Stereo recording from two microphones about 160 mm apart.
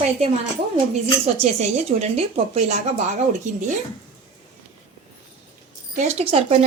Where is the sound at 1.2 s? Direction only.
45° right (ahead or behind).